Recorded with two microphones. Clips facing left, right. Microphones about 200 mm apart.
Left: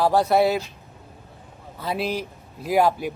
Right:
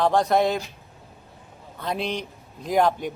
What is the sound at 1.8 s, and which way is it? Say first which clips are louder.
A man's voice: left 2 dB; 5° left (ahead or behind).